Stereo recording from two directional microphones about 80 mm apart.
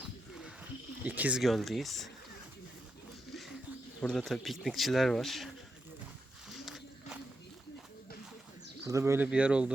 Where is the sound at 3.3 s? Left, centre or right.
Centre.